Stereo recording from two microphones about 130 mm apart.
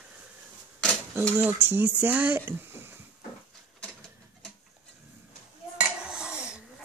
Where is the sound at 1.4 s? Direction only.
15° right (ahead or behind).